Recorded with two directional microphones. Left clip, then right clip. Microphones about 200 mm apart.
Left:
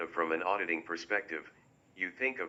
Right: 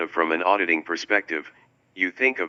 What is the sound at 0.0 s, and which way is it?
Speech, 45° right (ahead or behind).